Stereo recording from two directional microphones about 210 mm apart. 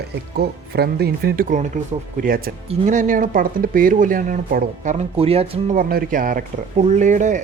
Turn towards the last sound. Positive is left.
turn(degrees=-35)  # may be behind; listen again after turning